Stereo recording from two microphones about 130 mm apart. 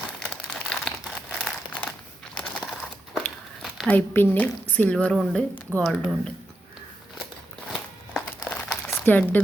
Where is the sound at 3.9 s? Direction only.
15° left (ahead or behind).